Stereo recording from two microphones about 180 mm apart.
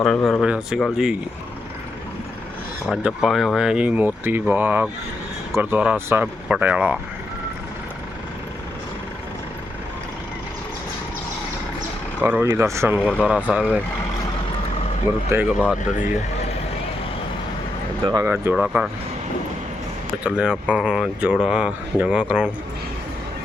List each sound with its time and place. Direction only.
0.0 s speech: 5° left (ahead or behind)
2.9 s speech: centre (ahead or behind)
12.2 s speech: 10° right (ahead or behind)
15.1 s speech: 10° right (ahead or behind)
18.0 s speech: 20° right (ahead or behind)
18.5 s speech: 5° right (ahead or behind)
20.2 s speech: 5° right (ahead or behind)